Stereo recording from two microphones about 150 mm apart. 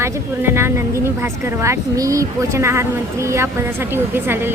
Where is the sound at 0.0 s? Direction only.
15° right (ahead or behind).